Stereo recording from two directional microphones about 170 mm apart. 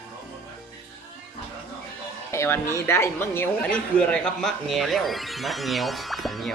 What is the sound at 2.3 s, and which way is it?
Speech, 15° left (ahead or behind).